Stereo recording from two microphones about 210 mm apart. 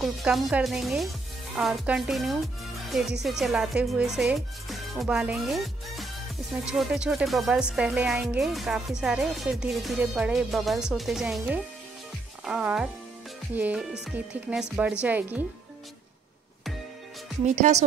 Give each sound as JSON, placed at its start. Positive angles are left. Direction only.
{"t": 0.0, "sound": "speech", "side_deg": 0}
{"t": 17.6, "sound": "a woman's voice", "side_deg": -35}